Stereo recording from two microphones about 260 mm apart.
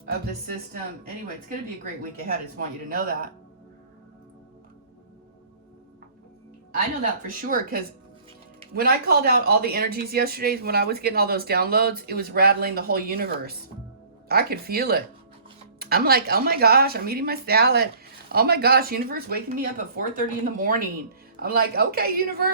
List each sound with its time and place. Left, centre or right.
1.8 s speech: right
7.4 s speech: right